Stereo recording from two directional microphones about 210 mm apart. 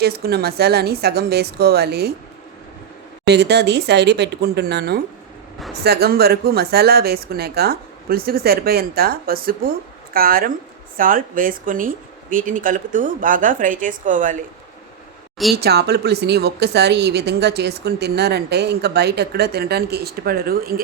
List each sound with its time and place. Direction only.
0.0 s a woman's voice: 50° right (ahead or behind)
3.2 s a woman's voice: 55° right (ahead or behind)
15.6 s a woman's voice: 50° right (ahead or behind)